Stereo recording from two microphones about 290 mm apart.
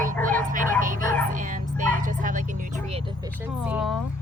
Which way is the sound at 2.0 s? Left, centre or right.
Right.